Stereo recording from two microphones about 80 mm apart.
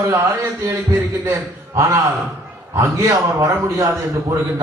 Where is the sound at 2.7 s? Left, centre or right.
Right.